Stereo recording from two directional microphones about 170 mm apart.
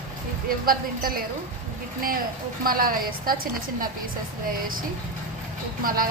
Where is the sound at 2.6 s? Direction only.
55° right (ahead or behind).